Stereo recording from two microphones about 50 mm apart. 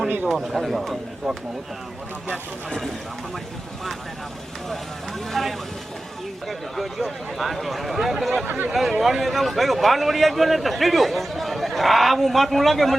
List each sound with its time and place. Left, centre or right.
0.3 s a man's voice: centre
2.3 s speech: centre
5.3 s a man's voice: centre
8.4 s speech: right
8.7 s a man's voice: centre